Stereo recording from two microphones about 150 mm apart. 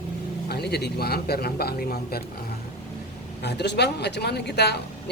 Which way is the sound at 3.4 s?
90° left.